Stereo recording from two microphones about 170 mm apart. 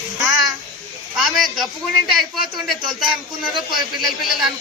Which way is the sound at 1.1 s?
Centre (ahead or behind).